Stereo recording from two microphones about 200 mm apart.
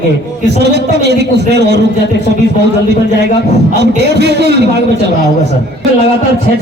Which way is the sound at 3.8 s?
55° right (ahead or behind).